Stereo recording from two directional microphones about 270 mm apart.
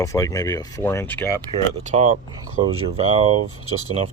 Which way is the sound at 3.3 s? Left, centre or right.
Right.